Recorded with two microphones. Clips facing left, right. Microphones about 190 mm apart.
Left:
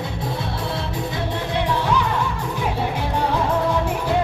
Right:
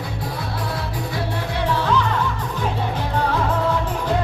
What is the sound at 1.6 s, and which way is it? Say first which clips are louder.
Music: even; 15° left (ahead or behind).